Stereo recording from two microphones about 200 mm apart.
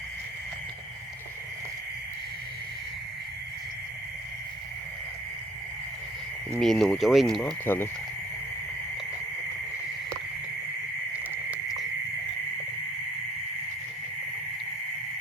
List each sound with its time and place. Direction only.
6.5 s speech: centre (ahead or behind)